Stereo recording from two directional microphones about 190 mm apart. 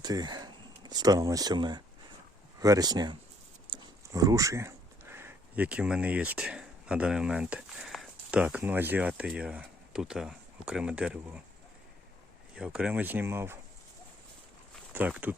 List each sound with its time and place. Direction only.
0.0 s speech: 20° right (ahead or behind)
12.5 s speech: 5° right (ahead or behind)
14.9 s speech: 10° right (ahead or behind)